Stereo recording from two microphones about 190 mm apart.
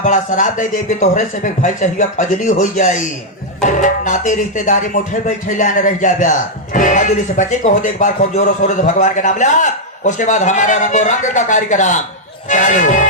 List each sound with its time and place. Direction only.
0.0 s speech: 40° left (ahead or behind)